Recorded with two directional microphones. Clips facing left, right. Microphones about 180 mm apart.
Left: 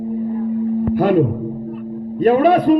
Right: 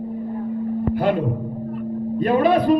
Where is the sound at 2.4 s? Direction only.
45° left (ahead or behind).